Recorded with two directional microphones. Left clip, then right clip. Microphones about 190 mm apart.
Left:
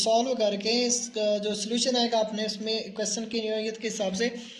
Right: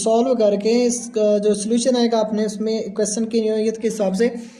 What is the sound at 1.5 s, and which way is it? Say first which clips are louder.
Speech: right 9 dB; 65° right (ahead or behind).